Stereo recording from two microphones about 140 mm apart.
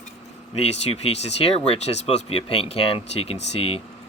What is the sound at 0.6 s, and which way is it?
Speech, 45° left (ahead or behind).